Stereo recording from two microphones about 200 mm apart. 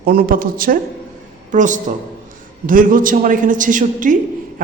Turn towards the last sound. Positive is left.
turn(degrees=-40)  # may be behind; listen again after turning